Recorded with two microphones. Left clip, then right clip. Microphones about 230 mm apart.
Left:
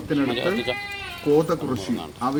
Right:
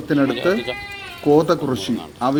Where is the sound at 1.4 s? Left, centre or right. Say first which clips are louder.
Right 6 dB; centre.